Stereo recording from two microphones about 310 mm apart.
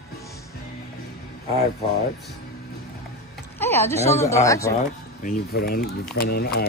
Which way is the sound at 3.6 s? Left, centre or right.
Centre.